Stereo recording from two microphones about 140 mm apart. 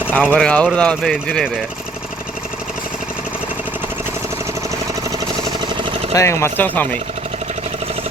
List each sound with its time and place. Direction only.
0.1 s speech: 10° left (ahead or behind)
5.4 s a sound: 35° right (ahead or behind)
6.1 s speech: 20° left (ahead or behind)